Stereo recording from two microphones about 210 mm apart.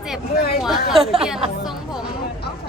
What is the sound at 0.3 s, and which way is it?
Speech, 45° left (ahead or behind).